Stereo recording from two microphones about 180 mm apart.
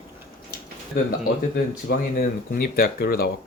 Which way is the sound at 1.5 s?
55° left (ahead or behind).